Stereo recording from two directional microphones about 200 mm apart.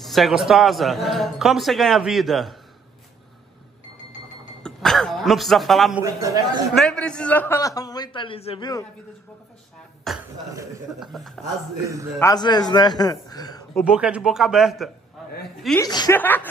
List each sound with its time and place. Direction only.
0.0 s a man's voice: centre (ahead or behind)
4.6 s speech: 5° left (ahead or behind)
6.0 s a man's voice: 15° right (ahead or behind)
6.7 s a man's voice: centre (ahead or behind); by 8.8 s 20° left (ahead or behind)
10.1 s a man's voice: centre (ahead or behind)
11.8 s a man's voice: 15° right (ahead or behind)
12.2 s a man's voice: 20° left (ahead or behind)
13.8 s a man's voice: 5° right (ahead or behind)
15.8 s a man's voice: 20° left (ahead or behind)
16.2 s a man's voice: 10° left (ahead or behind)